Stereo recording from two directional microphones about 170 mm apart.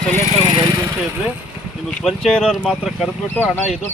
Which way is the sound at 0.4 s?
25° right (ahead or behind).